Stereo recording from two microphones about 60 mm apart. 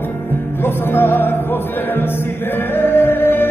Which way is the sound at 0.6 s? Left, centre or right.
Left.